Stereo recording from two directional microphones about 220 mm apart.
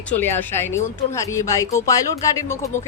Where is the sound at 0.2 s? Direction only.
10° left (ahead or behind).